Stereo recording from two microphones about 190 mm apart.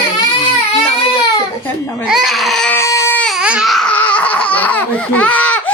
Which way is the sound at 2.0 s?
Centre (ahead or behind).